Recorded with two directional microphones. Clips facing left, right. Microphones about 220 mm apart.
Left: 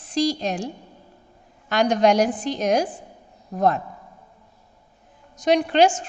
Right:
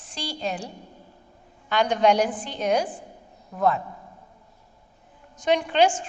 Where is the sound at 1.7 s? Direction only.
45° left (ahead or behind).